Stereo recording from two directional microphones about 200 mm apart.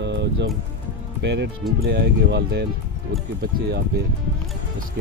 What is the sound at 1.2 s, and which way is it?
Speech, 60° right (ahead or behind).